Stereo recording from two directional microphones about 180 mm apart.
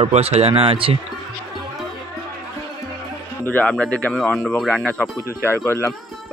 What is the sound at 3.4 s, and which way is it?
Speech, 5° left (ahead or behind).